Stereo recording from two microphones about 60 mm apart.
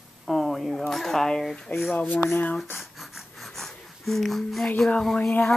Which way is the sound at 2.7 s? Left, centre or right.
Centre.